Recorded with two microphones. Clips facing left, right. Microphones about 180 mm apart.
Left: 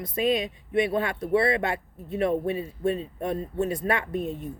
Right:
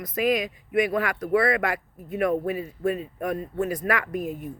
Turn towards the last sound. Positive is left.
turn(degrees=25)  # may be behind; listen again after turning